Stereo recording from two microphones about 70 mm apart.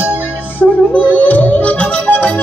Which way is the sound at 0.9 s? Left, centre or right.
Left.